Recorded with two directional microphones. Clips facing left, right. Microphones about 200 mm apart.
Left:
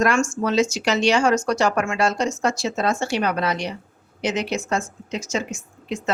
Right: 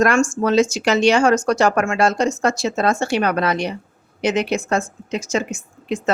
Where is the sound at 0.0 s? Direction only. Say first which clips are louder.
Right 4 dB; 45° right (ahead or behind).